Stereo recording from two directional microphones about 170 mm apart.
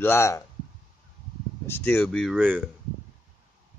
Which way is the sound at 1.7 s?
10° left (ahead or behind).